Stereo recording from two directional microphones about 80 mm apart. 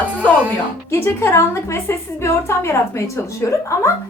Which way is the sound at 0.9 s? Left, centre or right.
Left.